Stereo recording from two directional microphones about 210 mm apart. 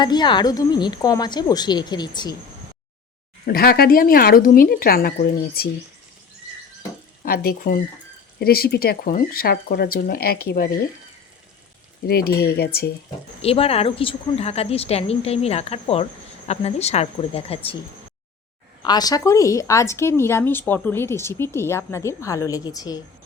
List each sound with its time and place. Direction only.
0.0 s speech: 20° left (ahead or behind)
3.4 s speech: 45° left (ahead or behind)
7.2 s speech: 45° left (ahead or behind)
12.0 s speech: 50° left (ahead or behind)
13.4 s speech: 30° left (ahead or behind)
18.9 s speech: 20° left (ahead or behind)